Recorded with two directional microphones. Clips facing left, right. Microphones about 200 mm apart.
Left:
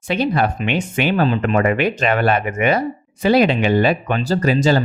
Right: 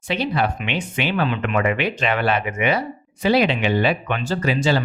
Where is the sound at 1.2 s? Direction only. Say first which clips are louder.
Left 4 dB; 35° left (ahead or behind).